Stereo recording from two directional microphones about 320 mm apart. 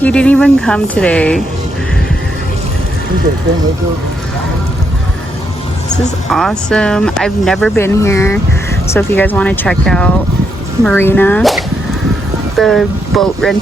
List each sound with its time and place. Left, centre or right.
0.0 s speech: centre
6.3 s speech: centre